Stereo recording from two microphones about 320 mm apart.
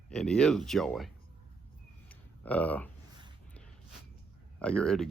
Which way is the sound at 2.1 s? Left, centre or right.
Centre.